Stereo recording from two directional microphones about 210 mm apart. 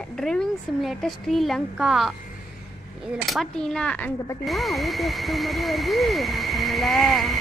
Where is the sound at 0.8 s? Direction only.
Centre (ahead or behind).